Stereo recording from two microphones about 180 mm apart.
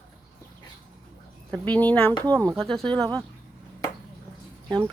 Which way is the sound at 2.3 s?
20° right (ahead or behind).